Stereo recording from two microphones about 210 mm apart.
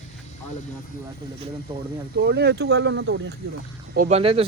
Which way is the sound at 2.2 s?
50° right (ahead or behind).